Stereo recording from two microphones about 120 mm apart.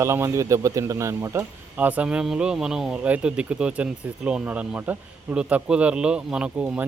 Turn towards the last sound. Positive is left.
turn(degrees=-10)  # may be behind; listen again after turning